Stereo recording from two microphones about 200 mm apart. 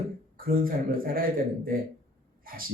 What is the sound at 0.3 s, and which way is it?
Speech, 45° right (ahead or behind).